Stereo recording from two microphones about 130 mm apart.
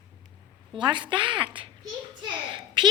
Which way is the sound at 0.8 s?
35° right (ahead or behind).